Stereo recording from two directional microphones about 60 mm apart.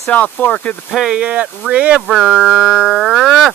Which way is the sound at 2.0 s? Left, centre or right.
Centre.